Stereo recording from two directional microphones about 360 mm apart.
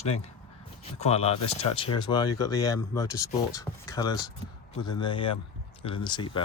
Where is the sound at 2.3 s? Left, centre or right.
Left.